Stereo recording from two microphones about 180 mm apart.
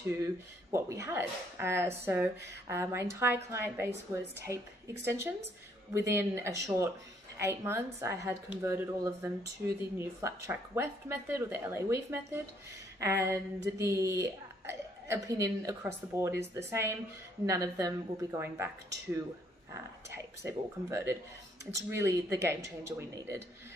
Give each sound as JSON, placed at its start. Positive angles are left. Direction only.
{"t": 0.7, "sound": "a woman's voice", "side_deg": -15}
{"t": 19.7, "sound": "a woman's voice", "side_deg": -15}